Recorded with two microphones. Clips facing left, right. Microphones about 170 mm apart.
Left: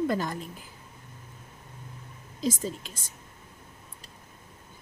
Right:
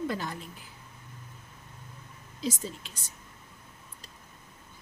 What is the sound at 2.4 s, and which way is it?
Speech, 45° left (ahead or behind).